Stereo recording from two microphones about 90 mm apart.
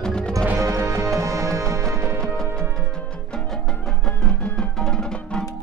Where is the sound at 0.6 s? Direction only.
35° right (ahead or behind).